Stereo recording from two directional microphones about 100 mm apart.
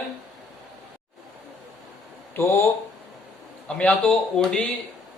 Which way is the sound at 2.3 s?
25° left (ahead or behind).